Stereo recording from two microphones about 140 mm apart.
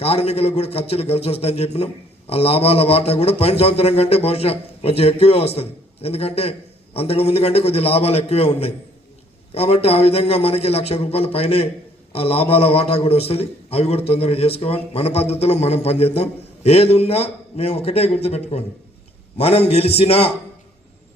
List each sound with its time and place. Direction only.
0.0 s a man's voice: 45° left (ahead or behind)